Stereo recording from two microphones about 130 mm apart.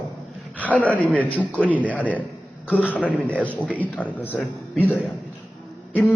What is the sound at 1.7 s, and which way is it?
A man's voice, 10° left (ahead or behind).